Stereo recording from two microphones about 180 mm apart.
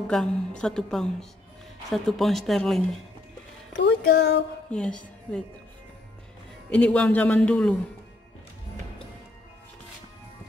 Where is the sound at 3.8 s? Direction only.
70° left (ahead or behind).